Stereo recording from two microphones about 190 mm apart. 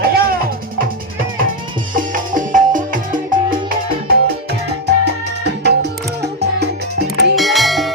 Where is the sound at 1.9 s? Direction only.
45° right (ahead or behind).